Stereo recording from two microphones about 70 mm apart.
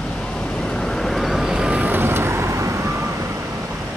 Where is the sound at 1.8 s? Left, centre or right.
Right.